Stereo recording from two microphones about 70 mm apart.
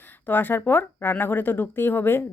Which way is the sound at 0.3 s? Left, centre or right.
Left.